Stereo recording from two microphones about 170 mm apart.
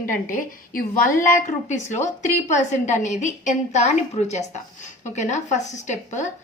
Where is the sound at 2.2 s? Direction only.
45° left (ahead or behind).